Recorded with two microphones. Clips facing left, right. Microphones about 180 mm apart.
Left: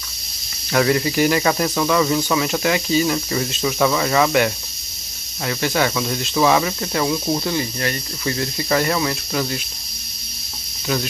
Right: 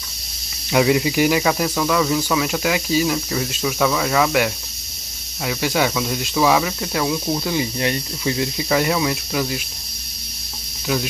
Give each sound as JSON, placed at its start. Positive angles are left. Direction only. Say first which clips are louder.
{"t": 0.7, "sound": "speech", "louder": "right 1 dB", "side_deg": -10}
{"t": 7.5, "sound": "speech", "louder": "right 2 dB", "side_deg": -20}
{"t": 8.2, "sound": "speech", "louder": "even", "side_deg": -10}